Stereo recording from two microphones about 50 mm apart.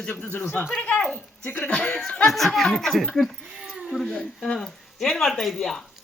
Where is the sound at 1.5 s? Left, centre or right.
Left.